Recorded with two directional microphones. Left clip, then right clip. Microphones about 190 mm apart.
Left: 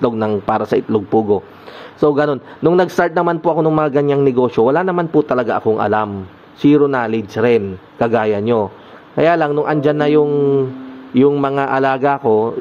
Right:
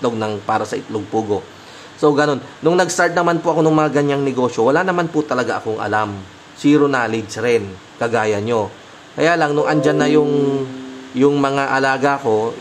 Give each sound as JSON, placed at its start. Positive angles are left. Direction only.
{"t": 0.0, "sound": "a man's voice", "side_deg": 35}